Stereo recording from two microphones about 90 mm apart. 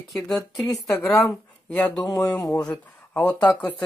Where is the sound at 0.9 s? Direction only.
15° left (ahead or behind).